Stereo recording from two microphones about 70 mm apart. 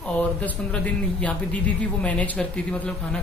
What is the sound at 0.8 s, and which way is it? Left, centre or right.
A man's voice, left.